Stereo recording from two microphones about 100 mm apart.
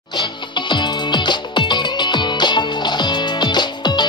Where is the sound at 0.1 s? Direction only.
50° left (ahead or behind).